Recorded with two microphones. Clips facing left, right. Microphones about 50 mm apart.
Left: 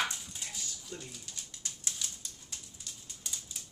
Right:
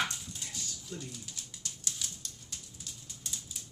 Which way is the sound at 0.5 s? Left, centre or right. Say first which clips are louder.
Right 2 dB; centre.